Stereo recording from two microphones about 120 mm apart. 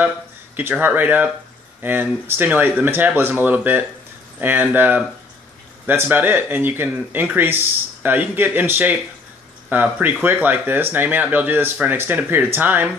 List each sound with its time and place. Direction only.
0.6 s speech: 15° right (ahead or behind)